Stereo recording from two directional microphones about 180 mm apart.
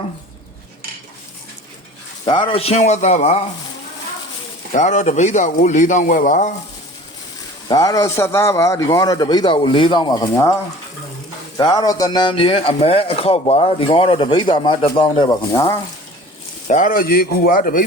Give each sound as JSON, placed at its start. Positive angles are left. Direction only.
{"t": 2.2, "sound": "a man's voice", "side_deg": 30}
{"t": 4.7, "sound": "a man's voice", "side_deg": 45}
{"t": 7.7, "sound": "speech", "side_deg": 20}
{"t": 11.5, "sound": "speech", "side_deg": 20}
{"t": 16.6, "sound": "a man's voice", "side_deg": 45}